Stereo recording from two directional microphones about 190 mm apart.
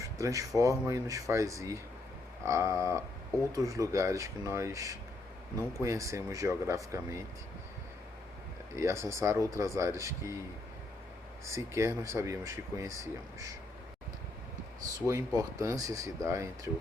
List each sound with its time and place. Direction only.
0.2 s speech: 15° right (ahead or behind)
8.7 s speech: 15° right (ahead or behind)
11.4 s speech: 15° right (ahead or behind)
15.1 s speech: 15° right (ahead or behind)